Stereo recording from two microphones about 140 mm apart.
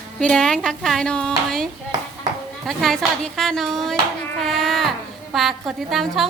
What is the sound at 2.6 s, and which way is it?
A woman's voice, centre (ahead or behind).